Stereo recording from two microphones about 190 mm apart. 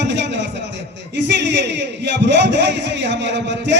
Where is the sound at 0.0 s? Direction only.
65° right (ahead or behind).